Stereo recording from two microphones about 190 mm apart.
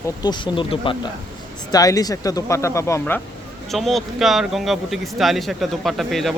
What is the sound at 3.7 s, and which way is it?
Speech, centre (ahead or behind).